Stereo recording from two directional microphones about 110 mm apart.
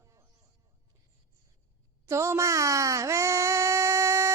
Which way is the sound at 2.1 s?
25° right (ahead or behind).